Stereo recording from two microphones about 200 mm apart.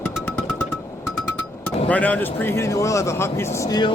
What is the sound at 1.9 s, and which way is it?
Speech, 5° left (ahead or behind).